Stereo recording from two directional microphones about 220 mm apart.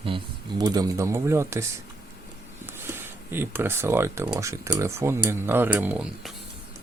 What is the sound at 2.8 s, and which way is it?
Speech, 10° right (ahead or behind).